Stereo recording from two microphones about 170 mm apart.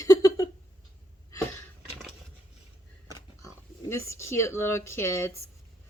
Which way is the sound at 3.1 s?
20° left (ahead or behind).